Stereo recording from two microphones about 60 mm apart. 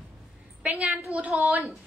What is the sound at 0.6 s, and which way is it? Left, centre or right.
Speech, right.